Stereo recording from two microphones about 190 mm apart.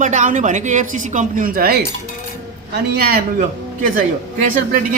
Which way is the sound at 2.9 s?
55° right (ahead or behind).